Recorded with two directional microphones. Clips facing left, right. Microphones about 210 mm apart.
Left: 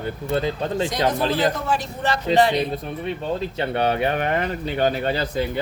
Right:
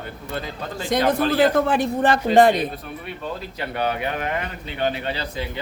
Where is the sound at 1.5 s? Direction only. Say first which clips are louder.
Right 6 dB; 55° right (ahead or behind).